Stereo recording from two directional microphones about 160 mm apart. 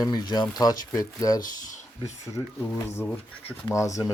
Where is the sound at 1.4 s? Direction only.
50° left (ahead or behind).